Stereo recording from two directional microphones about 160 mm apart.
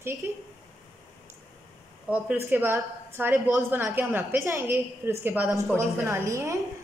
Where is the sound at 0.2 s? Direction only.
15° right (ahead or behind).